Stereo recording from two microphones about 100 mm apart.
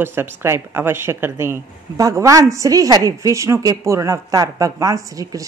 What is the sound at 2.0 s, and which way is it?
A woman's voice, 35° right (ahead or behind).